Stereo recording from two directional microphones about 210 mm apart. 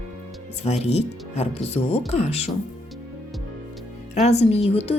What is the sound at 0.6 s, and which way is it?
Speech, 30° left (ahead or behind).